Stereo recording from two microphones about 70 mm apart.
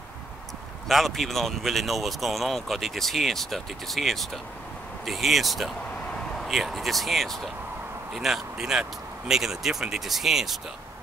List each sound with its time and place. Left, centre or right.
0.8 s a man's voice: centre